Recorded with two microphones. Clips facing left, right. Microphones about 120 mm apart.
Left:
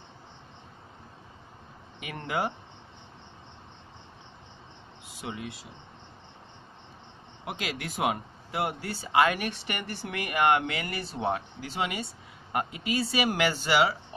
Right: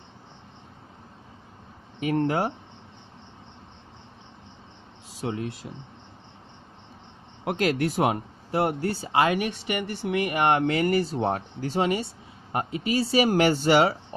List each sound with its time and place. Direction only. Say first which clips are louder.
2.0 s speech: right 8 dB; 35° right (ahead or behind)
5.1 s speech: right 7 dB; 35° right (ahead or behind)
7.4 s speech: right 11 dB; 45° right (ahead or behind)